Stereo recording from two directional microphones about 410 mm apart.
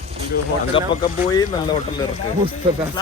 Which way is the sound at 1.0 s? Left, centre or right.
Centre.